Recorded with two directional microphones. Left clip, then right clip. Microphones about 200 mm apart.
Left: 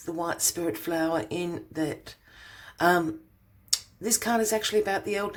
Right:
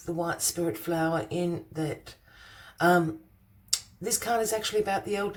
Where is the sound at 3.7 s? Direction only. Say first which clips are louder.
Left 2 dB; 35° left (ahead or behind).